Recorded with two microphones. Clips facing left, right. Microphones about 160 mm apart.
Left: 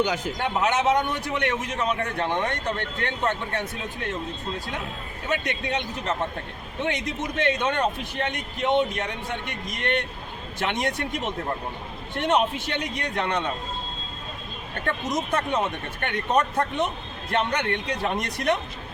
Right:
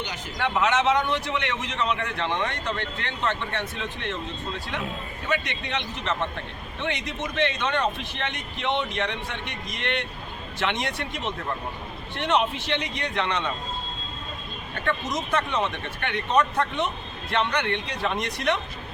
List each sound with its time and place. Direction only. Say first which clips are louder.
0.3 s a man's voice: right 3 dB; 45° left (ahead or behind)
5.3 s a man's voice: left 2 dB; 45° left (ahead or behind)
14.8 s a man's voice: left 1 dB; 45° left (ahead or behind)